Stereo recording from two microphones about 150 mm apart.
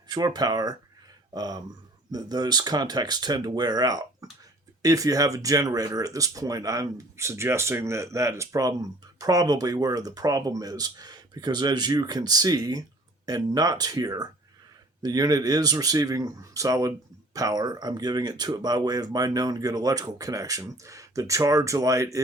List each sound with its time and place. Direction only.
0.1 s speech: 25° right (ahead or behind)